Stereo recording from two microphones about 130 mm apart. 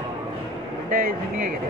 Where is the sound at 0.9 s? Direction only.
90° right.